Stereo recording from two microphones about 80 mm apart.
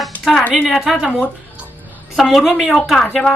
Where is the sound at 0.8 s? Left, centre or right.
Centre.